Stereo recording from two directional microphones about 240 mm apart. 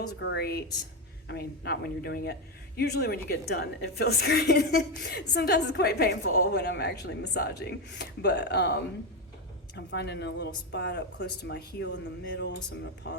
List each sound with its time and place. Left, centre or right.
0.2 s a woman's voice: left